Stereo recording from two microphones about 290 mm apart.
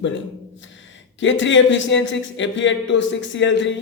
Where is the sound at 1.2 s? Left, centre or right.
Left.